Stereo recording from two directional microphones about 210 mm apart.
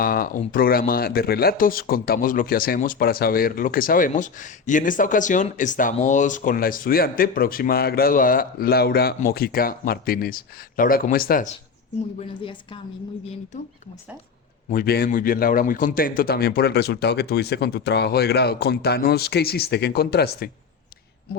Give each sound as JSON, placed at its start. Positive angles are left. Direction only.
{"t": 0.0, "sound": "speech", "side_deg": 45}
{"t": 12.3, "sound": "a woman's voice", "side_deg": 25}
{"t": 14.7, "sound": "speech", "side_deg": 45}